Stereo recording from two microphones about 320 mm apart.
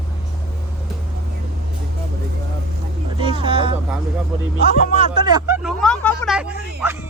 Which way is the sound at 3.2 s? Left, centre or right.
Centre.